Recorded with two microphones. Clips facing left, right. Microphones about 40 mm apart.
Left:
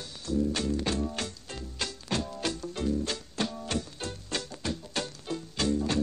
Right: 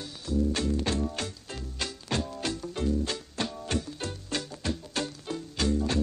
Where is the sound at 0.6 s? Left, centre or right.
Centre.